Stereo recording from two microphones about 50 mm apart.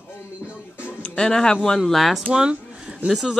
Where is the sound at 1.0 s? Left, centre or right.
Centre.